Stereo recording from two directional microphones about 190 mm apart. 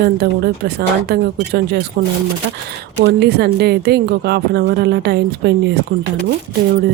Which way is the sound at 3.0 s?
60° right (ahead or behind).